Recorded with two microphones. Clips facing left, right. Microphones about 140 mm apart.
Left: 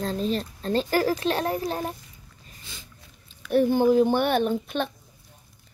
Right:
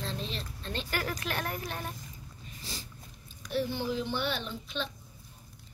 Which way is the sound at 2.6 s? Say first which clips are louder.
Right 3 dB; 35° right (ahead or behind).